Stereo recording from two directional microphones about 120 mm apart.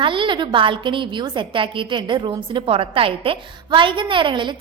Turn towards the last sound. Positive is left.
turn(degrees=-45)  # may be behind; listen again after turning